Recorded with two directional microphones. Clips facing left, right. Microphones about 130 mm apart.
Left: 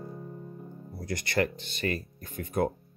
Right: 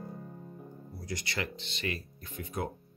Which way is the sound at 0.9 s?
55° left (ahead or behind).